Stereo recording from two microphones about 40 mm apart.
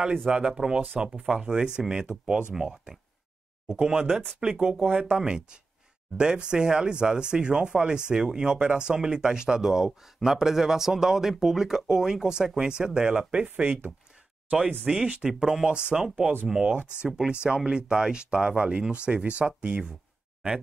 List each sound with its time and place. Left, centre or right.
0.3 s speech: centre
2.5 s speech: centre
3.6 s speech: right
4.8 s speech: right
5.2 s speech: right
13.4 s speech: right